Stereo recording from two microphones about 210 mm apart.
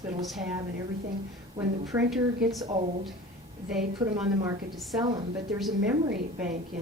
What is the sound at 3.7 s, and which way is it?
A woman's voice, 5° right (ahead or behind).